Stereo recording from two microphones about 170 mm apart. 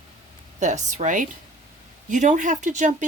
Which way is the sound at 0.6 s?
45° right (ahead or behind).